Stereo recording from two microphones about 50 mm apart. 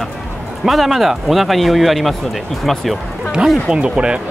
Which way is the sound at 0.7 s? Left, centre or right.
Centre.